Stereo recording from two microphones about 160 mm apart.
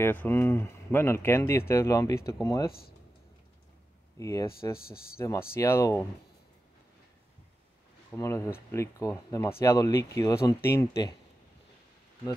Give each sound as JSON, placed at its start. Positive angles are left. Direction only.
{"t": 0.0, "sound": "speech", "side_deg": 15}
{"t": 4.2, "sound": "speech", "side_deg": 20}
{"t": 4.7, "sound": "speech", "side_deg": 70}
{"t": 5.1, "sound": "speech", "side_deg": 15}
{"t": 8.1, "sound": "speech", "side_deg": 15}